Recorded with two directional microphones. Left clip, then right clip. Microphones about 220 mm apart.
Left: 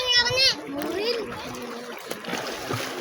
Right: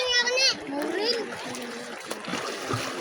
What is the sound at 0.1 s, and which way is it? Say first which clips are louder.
Splash: left 4 dB; 35° left (ahead or behind).